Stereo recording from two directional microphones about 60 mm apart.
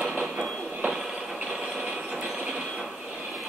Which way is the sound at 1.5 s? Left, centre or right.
Centre.